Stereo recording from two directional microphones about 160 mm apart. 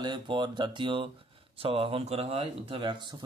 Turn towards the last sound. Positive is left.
turn(degrees=-25)  # may be behind; listen again after turning